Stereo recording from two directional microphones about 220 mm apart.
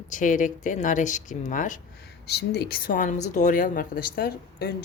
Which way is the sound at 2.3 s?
50° left (ahead or behind).